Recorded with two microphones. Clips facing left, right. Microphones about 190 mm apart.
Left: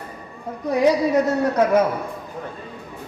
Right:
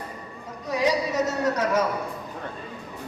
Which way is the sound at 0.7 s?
55° left (ahead or behind).